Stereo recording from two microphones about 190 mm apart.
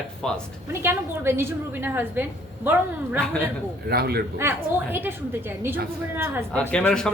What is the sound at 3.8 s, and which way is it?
Speech, 55° right (ahead or behind).